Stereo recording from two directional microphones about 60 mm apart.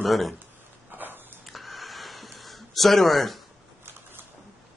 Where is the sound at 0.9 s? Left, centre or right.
Right.